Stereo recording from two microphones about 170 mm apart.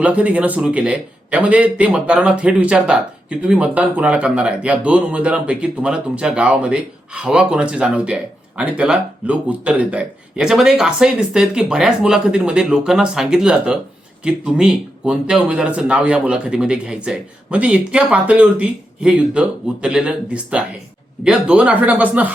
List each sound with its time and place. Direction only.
0.0 s a man's voice: 10° right (ahead or behind)